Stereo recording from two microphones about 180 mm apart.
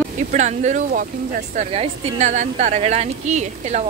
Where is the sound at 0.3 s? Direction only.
40° right (ahead or behind).